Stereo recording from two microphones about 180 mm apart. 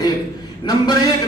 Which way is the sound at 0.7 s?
25° left (ahead or behind).